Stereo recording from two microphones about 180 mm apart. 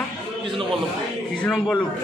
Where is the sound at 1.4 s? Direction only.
5° left (ahead or behind).